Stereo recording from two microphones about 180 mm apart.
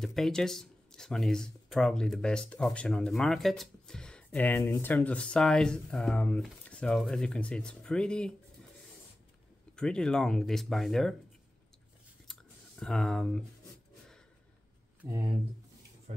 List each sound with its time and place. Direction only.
0.0 s speech: centre (ahead or behind)
9.8 s speech: 5° left (ahead or behind)
12.3 s a sound: 5° left (ahead or behind)
15.0 s speech: 20° right (ahead or behind)
16.1 s speech: 40° right (ahead or behind)